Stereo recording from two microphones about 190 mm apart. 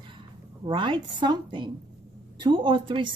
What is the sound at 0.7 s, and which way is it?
Speech, 25° right (ahead or behind).